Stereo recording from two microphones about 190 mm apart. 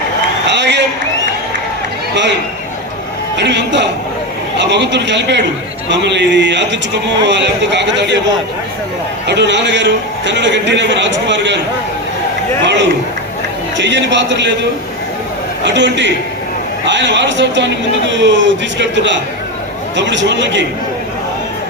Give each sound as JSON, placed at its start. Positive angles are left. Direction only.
{"t": 0.4, "sound": "a sound", "side_deg": -65}
{"t": 3.3, "sound": "a man's voice", "side_deg": -65}
{"t": 9.2, "sound": "a man's voice", "side_deg": -65}
{"t": 12.6, "sound": "a man's voice", "side_deg": -70}
{"t": 15.6, "sound": "a man's voice", "side_deg": -70}